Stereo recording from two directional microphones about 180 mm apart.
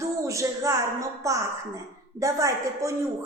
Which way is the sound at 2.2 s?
20° right (ahead or behind).